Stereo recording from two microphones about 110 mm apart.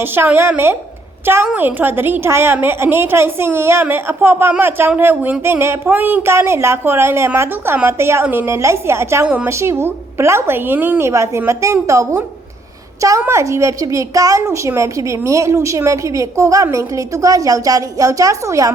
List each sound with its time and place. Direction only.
0.0 s a woman's voice: 20° right (ahead or behind)
9.2 s a woman's voice: 10° right (ahead or behind)
9.5 s a woman's voice: 25° right (ahead or behind)